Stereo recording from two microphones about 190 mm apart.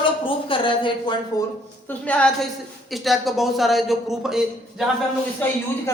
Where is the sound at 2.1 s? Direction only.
5° left (ahead or behind).